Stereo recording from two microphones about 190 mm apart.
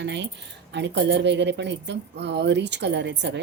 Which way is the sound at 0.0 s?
65° right (ahead or behind).